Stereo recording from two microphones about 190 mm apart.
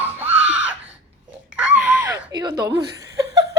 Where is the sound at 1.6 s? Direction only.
10° right (ahead or behind).